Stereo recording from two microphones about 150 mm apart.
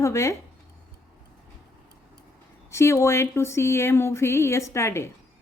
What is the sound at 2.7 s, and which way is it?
A woman's voice, 20° left (ahead or behind).